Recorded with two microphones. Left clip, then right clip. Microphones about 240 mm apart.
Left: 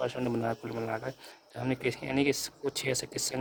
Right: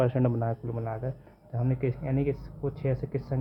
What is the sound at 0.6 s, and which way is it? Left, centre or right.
Speech, left.